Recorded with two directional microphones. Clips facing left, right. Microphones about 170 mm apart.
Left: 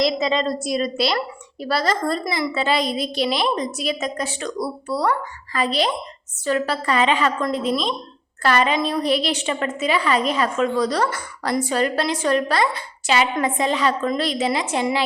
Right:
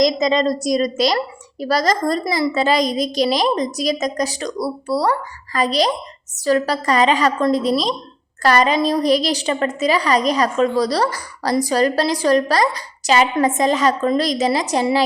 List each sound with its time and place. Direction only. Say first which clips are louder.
0.0 s a woman's voice: right 4 dB; 40° right (ahead or behind)